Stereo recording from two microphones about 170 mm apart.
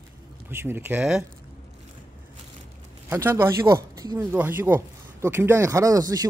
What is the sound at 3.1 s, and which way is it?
A man's voice, 15° right (ahead or behind).